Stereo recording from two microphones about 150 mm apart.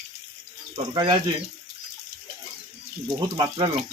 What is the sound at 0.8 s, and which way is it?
Speech, 30° right (ahead or behind).